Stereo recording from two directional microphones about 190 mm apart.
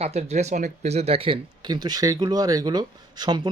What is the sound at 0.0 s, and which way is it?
Speech, 35° right (ahead or behind).